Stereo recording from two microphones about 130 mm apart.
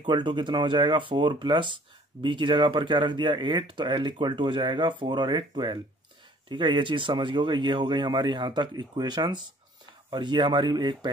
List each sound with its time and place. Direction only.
0.0 s speech: 35° right (ahead or behind)